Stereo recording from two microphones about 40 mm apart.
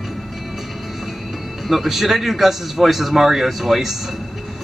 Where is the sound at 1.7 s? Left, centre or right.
Centre.